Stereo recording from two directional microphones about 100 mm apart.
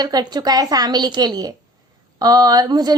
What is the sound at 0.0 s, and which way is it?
A woman's voice, 40° right (ahead or behind).